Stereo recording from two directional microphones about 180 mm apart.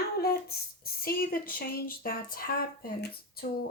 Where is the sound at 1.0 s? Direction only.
55° left (ahead or behind).